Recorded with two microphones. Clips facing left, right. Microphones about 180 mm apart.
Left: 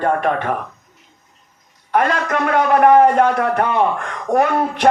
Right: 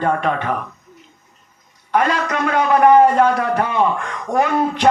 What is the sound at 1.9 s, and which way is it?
A man's voice, 50° left (ahead or behind).